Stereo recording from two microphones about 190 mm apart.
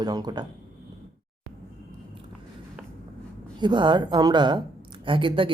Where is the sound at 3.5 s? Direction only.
25° right (ahead or behind).